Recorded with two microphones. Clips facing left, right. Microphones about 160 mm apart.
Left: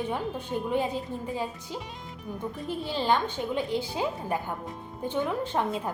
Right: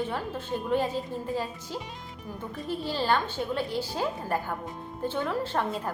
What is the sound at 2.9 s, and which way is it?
A woman's voice, 15° left (ahead or behind).